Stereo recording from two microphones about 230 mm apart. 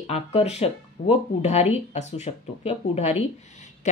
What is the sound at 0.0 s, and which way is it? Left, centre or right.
Speech, left.